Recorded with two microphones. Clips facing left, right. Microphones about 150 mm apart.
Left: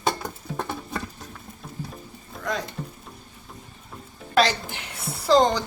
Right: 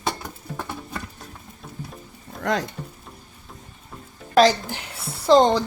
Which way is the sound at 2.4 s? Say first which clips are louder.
Right 5 dB; 80° right.